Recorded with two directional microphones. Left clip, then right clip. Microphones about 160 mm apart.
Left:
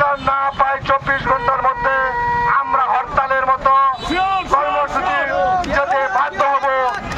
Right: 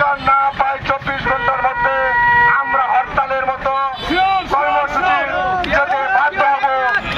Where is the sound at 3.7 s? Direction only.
25° left (ahead or behind).